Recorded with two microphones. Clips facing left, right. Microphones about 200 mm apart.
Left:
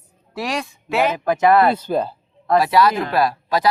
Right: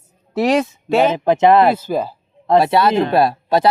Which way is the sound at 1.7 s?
10° right (ahead or behind).